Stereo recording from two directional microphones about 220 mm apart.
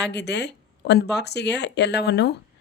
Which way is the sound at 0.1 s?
50° left (ahead or behind).